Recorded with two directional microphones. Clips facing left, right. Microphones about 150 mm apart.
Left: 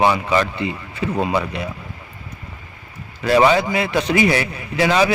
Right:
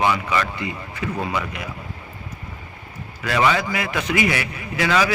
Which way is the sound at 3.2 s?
30° left (ahead or behind).